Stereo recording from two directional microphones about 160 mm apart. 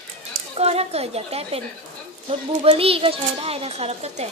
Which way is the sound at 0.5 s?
40° right (ahead or behind).